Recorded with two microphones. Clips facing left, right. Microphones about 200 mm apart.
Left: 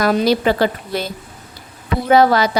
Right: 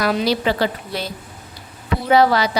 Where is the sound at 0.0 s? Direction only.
45° left (ahead or behind).